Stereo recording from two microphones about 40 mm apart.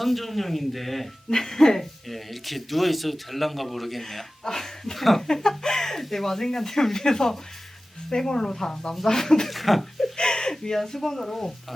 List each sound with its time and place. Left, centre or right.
0.0 s speech: centre
1.3 s speech: centre
5.3 s speech: centre
9.5 s speech: centre
10.2 s a sound: centre
10.5 s speech: centre